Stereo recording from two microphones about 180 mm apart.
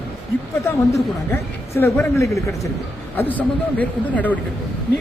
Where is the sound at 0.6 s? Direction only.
15° left (ahead or behind).